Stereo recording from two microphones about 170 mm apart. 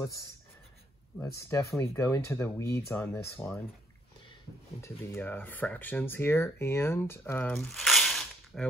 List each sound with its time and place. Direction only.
1.2 s speech: 15° left (ahead or behind)
4.8 s speech: 15° left (ahead or behind)